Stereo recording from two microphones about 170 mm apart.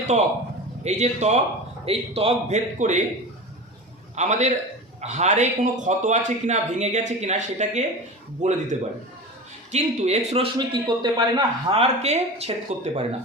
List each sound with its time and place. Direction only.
0.0 s a man's voice: 45° right (ahead or behind)
4.1 s a man's voice: 45° right (ahead or behind)
9.7 s a man's voice: 40° right (ahead or behind)